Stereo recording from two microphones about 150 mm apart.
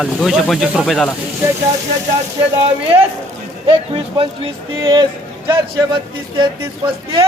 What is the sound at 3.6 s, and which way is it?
A man's voice, 40° right (ahead or behind).